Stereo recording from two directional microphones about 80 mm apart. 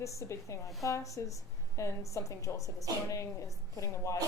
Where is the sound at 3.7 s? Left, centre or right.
Left.